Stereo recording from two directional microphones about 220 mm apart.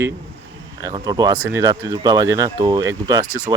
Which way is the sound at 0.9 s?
20° right (ahead or behind).